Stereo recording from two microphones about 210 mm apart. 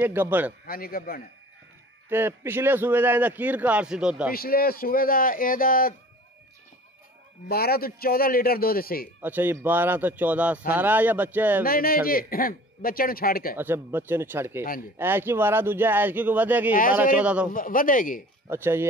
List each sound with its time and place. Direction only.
0.0 s speech: 10° right (ahead or behind)
0.7 s a man's voice: 45° left (ahead or behind)
2.0 s speech: 10° right (ahead or behind)
4.3 s a man's voice: 45° left (ahead or behind)
7.4 s a man's voice: 45° left (ahead or behind)
9.2 s speech: 10° right (ahead or behind)
11.6 s a man's voice: 45° left (ahead or behind)
13.6 s speech: 10° right (ahead or behind)
17.5 s a man's voice: 40° left (ahead or behind)
18.5 s speech: 10° right (ahead or behind)